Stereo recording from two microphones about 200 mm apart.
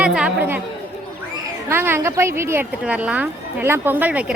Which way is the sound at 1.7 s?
10° right (ahead or behind).